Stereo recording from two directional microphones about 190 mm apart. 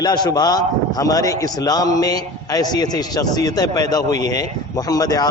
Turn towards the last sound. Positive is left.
turn(degrees=20)  # may be behind; listen again after turning